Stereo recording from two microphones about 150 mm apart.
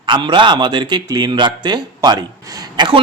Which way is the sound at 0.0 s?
30° right (ahead or behind).